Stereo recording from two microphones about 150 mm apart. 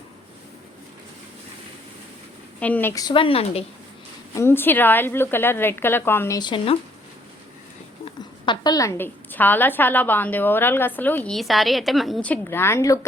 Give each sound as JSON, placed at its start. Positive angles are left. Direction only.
{"t": 2.6, "sound": "a woman's voice", "side_deg": 10}
{"t": 2.9, "sound": "speech", "side_deg": 25}
{"t": 4.4, "sound": "a woman's voice", "side_deg": 15}
{"t": 8.4, "sound": "a woman's voice", "side_deg": 25}
{"t": 11.3, "sound": "a woman's voice", "side_deg": 0}